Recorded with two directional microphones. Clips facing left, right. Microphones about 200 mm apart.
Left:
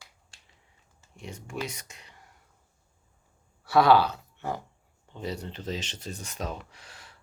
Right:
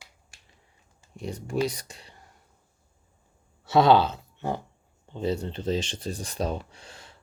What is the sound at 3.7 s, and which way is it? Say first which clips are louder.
Speech: right 1 dB; 25° right (ahead or behind).